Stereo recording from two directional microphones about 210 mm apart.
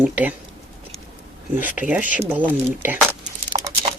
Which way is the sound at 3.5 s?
30° right (ahead or behind).